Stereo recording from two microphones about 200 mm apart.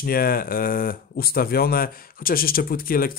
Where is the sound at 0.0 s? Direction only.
45° left (ahead or behind).